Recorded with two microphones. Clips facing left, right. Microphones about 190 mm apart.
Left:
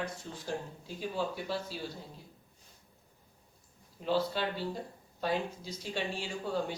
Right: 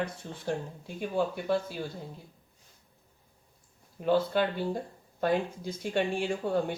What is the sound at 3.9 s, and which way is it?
Speech, 55° right (ahead or behind).